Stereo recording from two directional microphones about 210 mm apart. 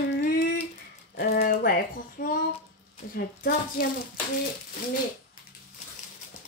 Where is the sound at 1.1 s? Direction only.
45° left (ahead or behind).